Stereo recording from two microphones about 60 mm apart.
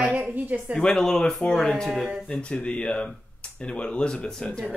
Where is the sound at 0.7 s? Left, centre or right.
Centre.